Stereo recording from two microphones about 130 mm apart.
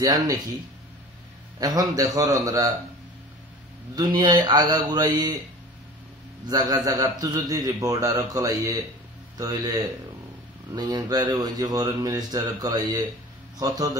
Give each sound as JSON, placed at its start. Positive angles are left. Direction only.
{"t": 0.0, "sound": "a man's voice", "side_deg": -30}
{"t": 1.6, "sound": "a man's voice", "side_deg": -30}
{"t": 3.9, "sound": "speech", "side_deg": -35}
{"t": 6.4, "sound": "a man's voice", "side_deg": -30}
{"t": 10.7, "sound": "a man's voice", "side_deg": -30}